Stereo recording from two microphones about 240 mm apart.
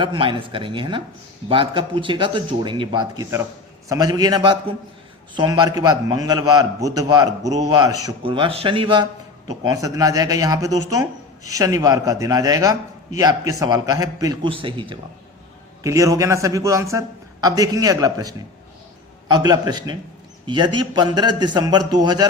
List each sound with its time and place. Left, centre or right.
0.0 s speech: centre